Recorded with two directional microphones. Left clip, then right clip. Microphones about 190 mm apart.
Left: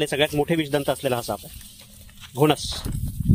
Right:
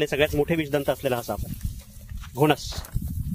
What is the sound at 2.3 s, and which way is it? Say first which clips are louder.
Speech: left 2 dB; 40° left (ahead or behind).